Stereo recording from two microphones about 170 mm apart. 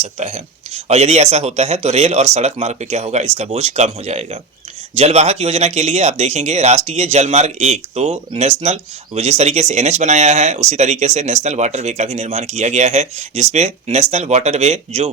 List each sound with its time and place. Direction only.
0.0 s speech: 40° right (ahead or behind)